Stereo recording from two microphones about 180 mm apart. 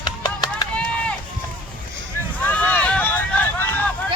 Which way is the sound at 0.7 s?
5° left (ahead or behind).